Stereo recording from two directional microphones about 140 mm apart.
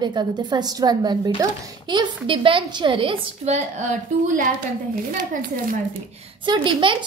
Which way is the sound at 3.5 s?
55° right (ahead or behind).